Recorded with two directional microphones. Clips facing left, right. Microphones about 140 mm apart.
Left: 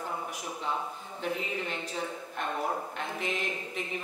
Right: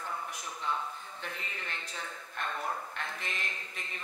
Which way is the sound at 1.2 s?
15° left (ahead or behind).